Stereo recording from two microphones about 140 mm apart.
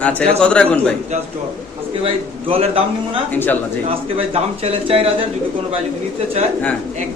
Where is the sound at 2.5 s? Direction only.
45° right (ahead or behind).